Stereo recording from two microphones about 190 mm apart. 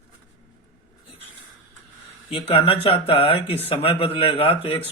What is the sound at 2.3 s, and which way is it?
Speech, 25° left (ahead or behind).